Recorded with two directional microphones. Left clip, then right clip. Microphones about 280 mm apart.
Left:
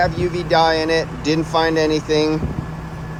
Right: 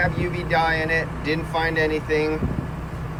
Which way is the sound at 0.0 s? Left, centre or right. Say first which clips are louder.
Left 5 dB; centre.